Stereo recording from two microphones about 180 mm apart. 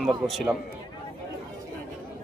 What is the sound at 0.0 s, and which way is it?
Speech, centre (ahead or behind).